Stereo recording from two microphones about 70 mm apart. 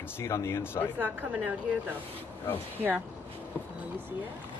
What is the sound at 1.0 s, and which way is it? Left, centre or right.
Speech, right.